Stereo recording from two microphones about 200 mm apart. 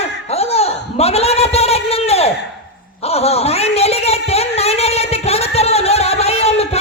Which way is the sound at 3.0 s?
30° left (ahead or behind).